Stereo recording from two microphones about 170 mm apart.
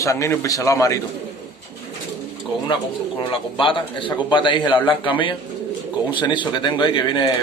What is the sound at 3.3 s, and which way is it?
A man's voice, 30° left (ahead or behind).